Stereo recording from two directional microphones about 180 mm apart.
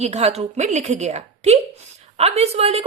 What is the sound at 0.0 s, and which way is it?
A woman's voice, 35° right (ahead or behind).